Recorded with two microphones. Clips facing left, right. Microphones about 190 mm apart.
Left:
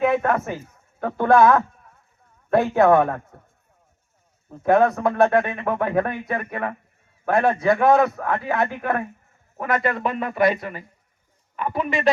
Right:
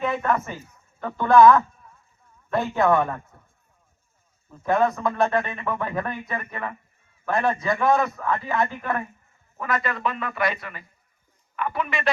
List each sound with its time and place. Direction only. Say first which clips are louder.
0.0 s speech: left 4 dB; 60° left (ahead or behind)
0.5 s speech: left 6 dB; 50° left (ahead or behind); by 1.6 s 65° left (ahead or behind)
2.6 s speech: left 4 dB; 65° left (ahead or behind)
4.6 s a man's voice: left 4 dB; 65° left (ahead or behind); by 12.1 s 40° left (ahead or behind)